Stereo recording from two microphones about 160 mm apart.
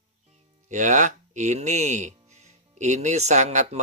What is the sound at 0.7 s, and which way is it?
Speech, 50° right (ahead or behind).